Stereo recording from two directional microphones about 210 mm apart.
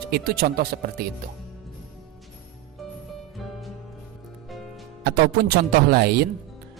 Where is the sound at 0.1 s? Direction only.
45° right (ahead or behind).